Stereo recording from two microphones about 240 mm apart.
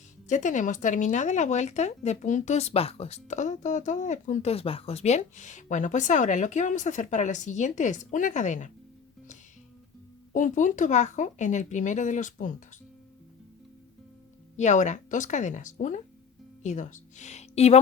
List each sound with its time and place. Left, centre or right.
0.3 s speech: left
10.3 s speech: left
14.5 s speech: left